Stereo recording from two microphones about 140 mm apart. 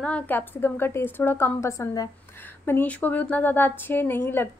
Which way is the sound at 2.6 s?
15° left (ahead or behind).